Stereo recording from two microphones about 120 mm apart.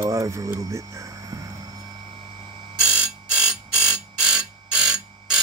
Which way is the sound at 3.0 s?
5° right (ahead or behind).